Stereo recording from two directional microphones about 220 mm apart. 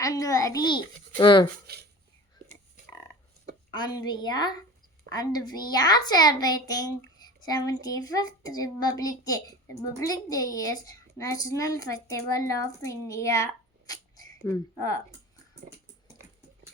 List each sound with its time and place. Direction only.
0.0 s speech: 15° left (ahead or behind)
1.6 s a sound: 45° right (ahead or behind)
3.7 s a woman's voice: 20° left (ahead or behind)
14.4 s speech: 15° left (ahead or behind)